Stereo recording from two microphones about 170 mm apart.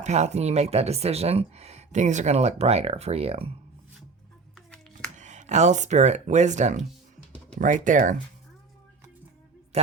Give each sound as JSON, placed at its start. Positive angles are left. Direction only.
{"t": 0.0, "sound": "speech", "side_deg": -40}
{"t": 4.5, "sound": "hands", "side_deg": 5}
{"t": 5.1, "sound": "speech", "side_deg": -45}
{"t": 9.7, "sound": "speech", "side_deg": -35}